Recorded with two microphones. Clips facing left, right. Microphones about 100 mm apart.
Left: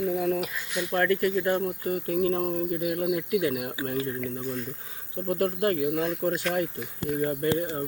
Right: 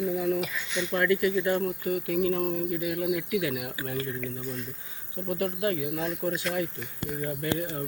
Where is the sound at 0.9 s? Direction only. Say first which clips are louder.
Left 1 dB; 45° left (ahead or behind).